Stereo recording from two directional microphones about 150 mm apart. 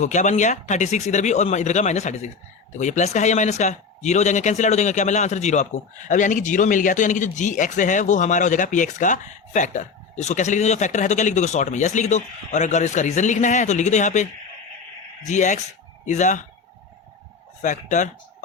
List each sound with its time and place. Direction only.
0.0 s speech: 55° left (ahead or behind)
17.6 s speech: 55° left (ahead or behind)